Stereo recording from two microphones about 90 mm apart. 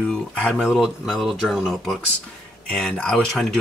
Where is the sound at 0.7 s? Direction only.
5° right (ahead or behind).